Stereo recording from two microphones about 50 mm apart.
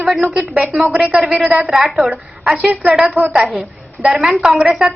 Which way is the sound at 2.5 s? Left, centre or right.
Right.